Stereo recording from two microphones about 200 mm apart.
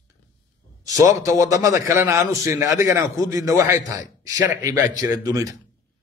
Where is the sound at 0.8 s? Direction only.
15° right (ahead or behind).